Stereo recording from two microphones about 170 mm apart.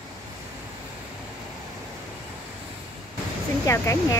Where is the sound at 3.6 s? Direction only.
15° left (ahead or behind).